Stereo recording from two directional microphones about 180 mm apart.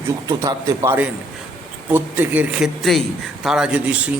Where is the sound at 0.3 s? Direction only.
20° right (ahead or behind).